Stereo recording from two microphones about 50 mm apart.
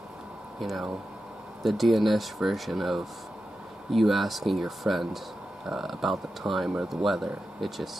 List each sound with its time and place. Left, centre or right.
0.6 s speech: centre